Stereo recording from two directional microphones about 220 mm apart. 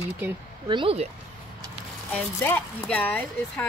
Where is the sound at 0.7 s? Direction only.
25° right (ahead or behind).